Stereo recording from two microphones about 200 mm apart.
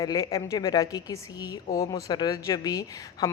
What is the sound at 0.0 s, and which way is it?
A woman's voice, 15° left (ahead or behind).